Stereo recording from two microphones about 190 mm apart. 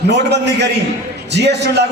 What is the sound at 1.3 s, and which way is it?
Speech, 65° right (ahead or behind).